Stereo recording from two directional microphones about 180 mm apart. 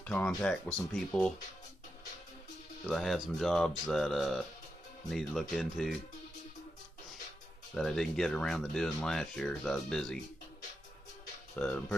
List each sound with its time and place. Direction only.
0.0 s speech: 10° left (ahead or behind)
2.9 s speech: centre (ahead or behind)
7.7 s speech: centre (ahead or behind)
11.5 s speech: 5° left (ahead or behind)